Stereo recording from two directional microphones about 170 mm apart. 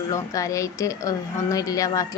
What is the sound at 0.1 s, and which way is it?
A woman's voice, 20° left (ahead or behind).